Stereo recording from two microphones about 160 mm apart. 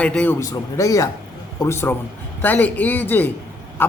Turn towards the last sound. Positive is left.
turn(degrees=15)  # may be behind; listen again after turning